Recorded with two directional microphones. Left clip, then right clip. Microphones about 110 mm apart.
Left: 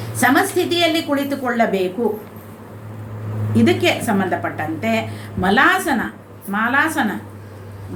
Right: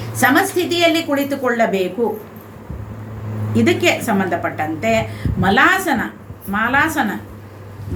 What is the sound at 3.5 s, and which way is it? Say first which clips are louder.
A woman's voice: right 1 dB; 30° right (ahead or behind).